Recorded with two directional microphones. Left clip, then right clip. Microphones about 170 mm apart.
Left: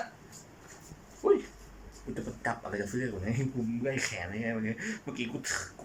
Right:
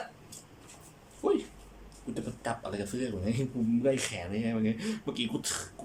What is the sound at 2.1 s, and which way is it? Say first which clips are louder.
Speech: left 1 dB; 15° right (ahead or behind).